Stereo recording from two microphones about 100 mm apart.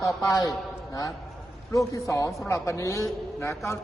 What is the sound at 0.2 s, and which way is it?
Speech, 35° left (ahead or behind).